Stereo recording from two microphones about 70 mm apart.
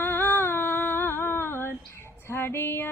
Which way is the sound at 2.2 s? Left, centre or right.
Left.